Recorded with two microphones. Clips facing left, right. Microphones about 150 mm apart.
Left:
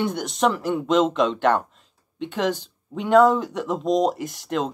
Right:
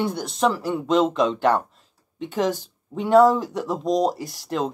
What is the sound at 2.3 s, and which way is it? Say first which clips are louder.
Speech: right 1 dB; 40° right (ahead or behind).